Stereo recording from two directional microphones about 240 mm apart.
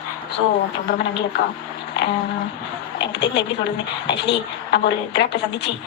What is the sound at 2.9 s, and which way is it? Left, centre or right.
A woman's voice, left.